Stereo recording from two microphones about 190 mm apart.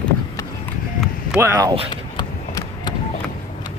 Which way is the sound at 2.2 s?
20° left (ahead or behind).